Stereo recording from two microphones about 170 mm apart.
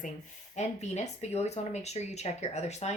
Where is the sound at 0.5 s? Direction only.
40° left (ahead or behind).